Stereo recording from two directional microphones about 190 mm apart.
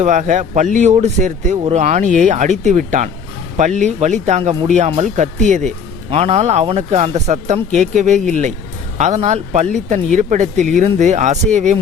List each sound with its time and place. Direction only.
0.0 s speech: 40° right (ahead or behind)